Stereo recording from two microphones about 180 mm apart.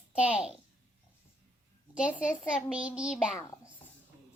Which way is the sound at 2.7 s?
5° right (ahead or behind).